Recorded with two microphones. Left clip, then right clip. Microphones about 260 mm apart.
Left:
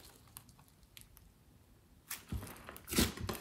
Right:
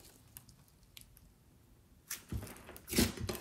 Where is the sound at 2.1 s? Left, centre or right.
Left.